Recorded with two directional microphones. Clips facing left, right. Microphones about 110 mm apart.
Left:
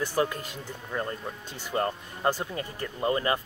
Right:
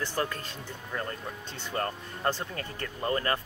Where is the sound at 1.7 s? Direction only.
15° left (ahead or behind).